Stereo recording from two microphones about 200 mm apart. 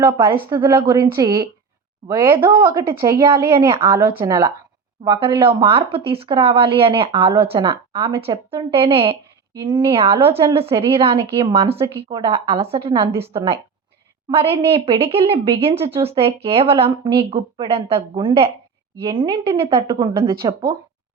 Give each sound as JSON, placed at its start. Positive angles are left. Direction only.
{"t": 0.0, "sound": "a woman's voice", "side_deg": -10}
{"t": 3.5, "sound": "speech", "side_deg": -25}
{"t": 3.8, "sound": "a woman's voice", "side_deg": -10}
{"t": 10.2, "sound": "a woman's voice", "side_deg": -10}
{"t": 10.4, "sound": "speech", "side_deg": -30}